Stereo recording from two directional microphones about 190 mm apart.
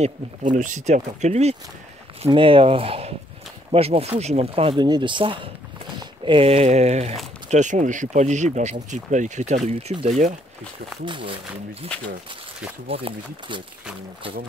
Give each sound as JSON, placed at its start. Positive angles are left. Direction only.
{"t": 0.0, "sound": "speech", "side_deg": -40}
{"t": 11.1, "sound": "speech", "side_deg": -25}
{"t": 11.9, "sound": "speech", "side_deg": 5}
{"t": 12.8, "sound": "speech", "side_deg": -30}